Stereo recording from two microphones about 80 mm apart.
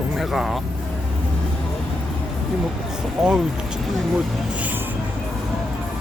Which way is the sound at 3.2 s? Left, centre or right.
Centre.